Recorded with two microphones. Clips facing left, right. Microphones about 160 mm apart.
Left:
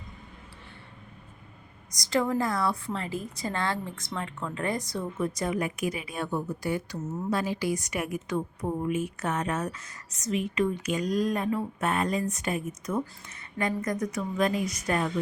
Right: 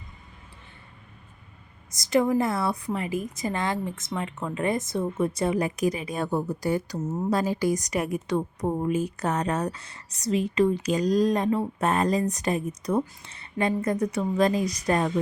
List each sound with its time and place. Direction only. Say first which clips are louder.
2.0 s a woman's voice: right 4 dB; 20° right (ahead or behind); by 15.1 s 35° right (ahead or behind)